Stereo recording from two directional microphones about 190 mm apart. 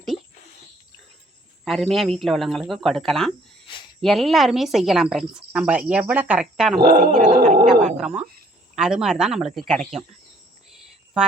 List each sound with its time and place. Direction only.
1.6 s a woman's voice: centre (ahead or behind)
6.7 s dog: 55° right (ahead or behind)
7.9 s a woman's voice: centre (ahead or behind)
10.7 s a sound: 5° right (ahead or behind)